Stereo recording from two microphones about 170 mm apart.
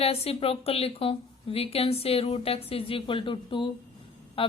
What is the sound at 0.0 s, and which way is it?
A woman's voice, 35° left (ahead or behind).